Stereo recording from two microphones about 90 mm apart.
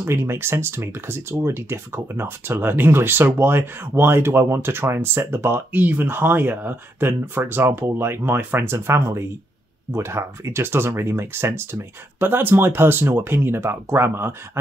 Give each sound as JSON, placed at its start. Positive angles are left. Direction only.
{"t": 0.0, "sound": "speech", "side_deg": -30}